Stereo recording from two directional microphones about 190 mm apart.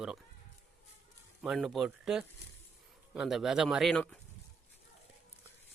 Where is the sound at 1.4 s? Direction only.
Centre (ahead or behind).